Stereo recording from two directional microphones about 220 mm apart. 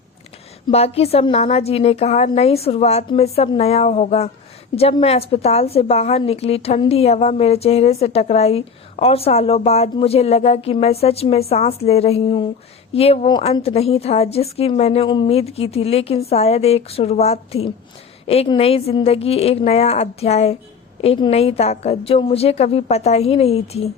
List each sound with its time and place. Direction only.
0.7 s a woman's voice: 25° left (ahead or behind)